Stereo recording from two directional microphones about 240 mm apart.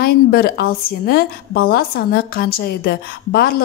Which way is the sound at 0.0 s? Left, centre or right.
Left.